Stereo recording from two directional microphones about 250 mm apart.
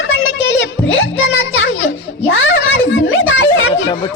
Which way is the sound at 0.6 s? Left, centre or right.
Left.